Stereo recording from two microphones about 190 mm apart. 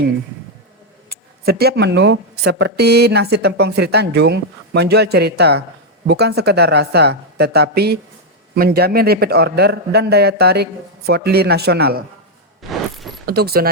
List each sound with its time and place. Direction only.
1.1 s speech: 55° right (ahead or behind)
12.6 s mechanisms: centre (ahead or behind)
13.2 s speech: 55° right (ahead or behind)